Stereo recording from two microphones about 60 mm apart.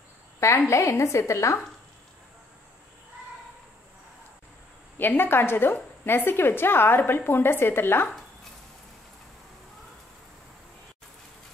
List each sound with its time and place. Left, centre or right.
0.4 s a woman's voice: left
4.9 s a woman's voice: left